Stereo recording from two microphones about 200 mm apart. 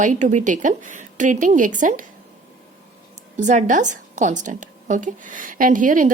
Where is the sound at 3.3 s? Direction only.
40° right (ahead or behind).